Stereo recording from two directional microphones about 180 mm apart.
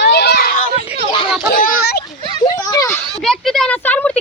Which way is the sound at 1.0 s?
30° left (ahead or behind).